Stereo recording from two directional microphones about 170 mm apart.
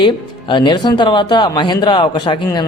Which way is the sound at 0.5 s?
30° left (ahead or behind).